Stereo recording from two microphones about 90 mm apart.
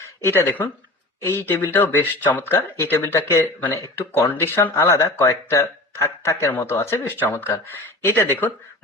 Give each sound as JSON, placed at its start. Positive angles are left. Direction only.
{"t": 0.2, "sound": "speech", "side_deg": 25}